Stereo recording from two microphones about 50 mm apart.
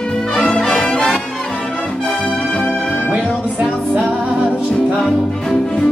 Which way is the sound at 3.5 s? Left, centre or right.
Right.